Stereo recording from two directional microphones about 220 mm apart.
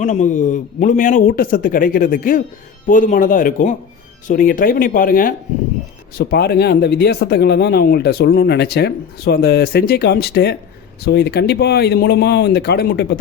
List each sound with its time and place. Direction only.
0.0 s a man's voice: 35° left (ahead or behind)